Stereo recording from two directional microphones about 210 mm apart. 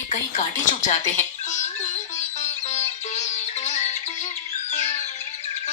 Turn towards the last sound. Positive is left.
turn(degrees=35)  # may be behind; listen again after turning